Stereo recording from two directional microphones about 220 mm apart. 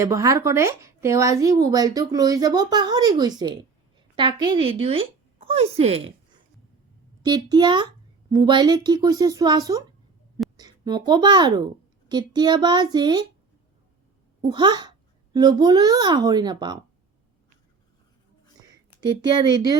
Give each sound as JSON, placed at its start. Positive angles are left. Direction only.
{"t": 0.0, "sound": "a woman's voice", "side_deg": -15}
{"t": 7.2, "sound": "a woman's voice", "side_deg": -20}
{"t": 14.4, "sound": "a child's voice", "side_deg": -20}
{"t": 18.7, "sound": "speech", "side_deg": -20}